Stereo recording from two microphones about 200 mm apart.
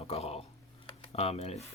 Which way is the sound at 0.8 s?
30° left (ahead or behind).